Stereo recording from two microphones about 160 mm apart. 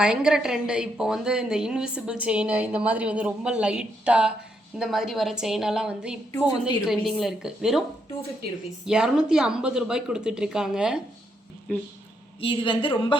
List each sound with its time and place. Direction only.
0.0 s a woman's voice: 5° right (ahead or behind)
6.3 s a woman's voice: 25° left (ahead or behind)
6.8 s a woman's voice: centre (ahead or behind)
12.4 s a woman's voice: 30° left (ahead or behind)